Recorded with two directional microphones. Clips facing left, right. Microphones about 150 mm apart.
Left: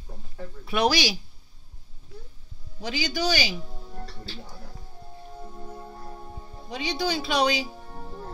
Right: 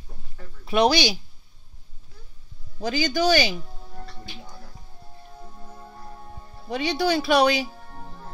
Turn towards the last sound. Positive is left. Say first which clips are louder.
# right 5 dB
turn(degrees=-60)  # may be behind; listen again after turning